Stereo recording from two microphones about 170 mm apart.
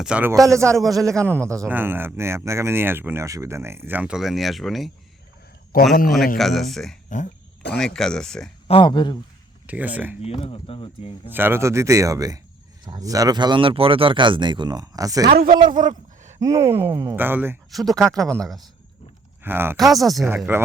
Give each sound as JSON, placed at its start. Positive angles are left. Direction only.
{"t": 0.0, "sound": "speech", "side_deg": -10}
{"t": 5.7, "sound": "speech", "side_deg": 60}
{"t": 6.3, "sound": "speech", "side_deg": 0}
{"t": 8.6, "sound": "speech", "side_deg": 30}
{"t": 9.6, "sound": "speech", "side_deg": -10}
{"t": 10.4, "sound": "speech", "side_deg": 35}
{"t": 11.3, "sound": "speech", "side_deg": -10}
{"t": 15.3, "sound": "a man's voice", "side_deg": -55}
{"t": 16.4, "sound": "speech", "side_deg": -20}
{"t": 17.7, "sound": "speech", "side_deg": 0}
{"t": 19.4, "sound": "speech", "side_deg": -10}
{"t": 19.7, "sound": "speech", "side_deg": 0}
{"t": 20.5, "sound": "speech", "side_deg": -10}